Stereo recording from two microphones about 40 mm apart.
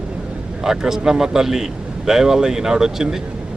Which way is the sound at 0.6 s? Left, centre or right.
Centre.